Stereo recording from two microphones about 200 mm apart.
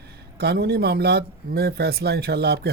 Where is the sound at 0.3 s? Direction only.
55° right (ahead or behind).